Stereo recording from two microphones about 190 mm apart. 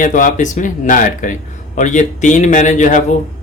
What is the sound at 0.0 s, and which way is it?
Speech, 40° left (ahead or behind).